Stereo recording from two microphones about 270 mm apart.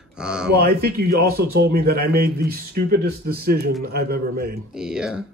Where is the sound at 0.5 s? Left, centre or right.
Right.